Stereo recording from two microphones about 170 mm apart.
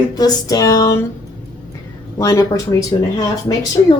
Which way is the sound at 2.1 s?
20° left (ahead or behind).